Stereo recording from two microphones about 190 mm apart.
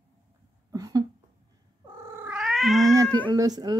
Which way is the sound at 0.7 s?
20° right (ahead or behind).